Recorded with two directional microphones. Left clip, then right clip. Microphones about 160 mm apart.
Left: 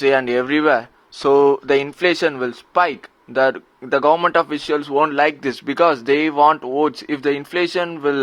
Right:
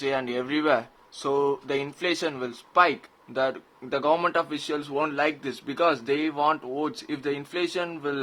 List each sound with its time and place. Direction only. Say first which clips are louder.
0.0 s speech: left 11 dB; 35° left (ahead or behind)